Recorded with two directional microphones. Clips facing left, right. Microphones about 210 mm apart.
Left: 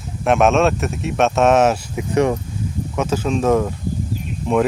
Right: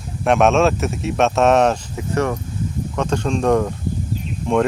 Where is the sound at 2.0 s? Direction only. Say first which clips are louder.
Left 6 dB; 15° left (ahead or behind).